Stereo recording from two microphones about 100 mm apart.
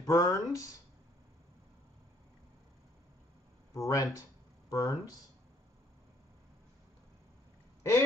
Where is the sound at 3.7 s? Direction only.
35° left (ahead or behind).